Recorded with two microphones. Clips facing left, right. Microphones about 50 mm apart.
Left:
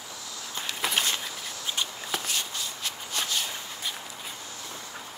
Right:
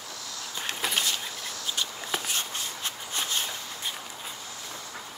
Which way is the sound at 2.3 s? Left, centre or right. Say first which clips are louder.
Even; right.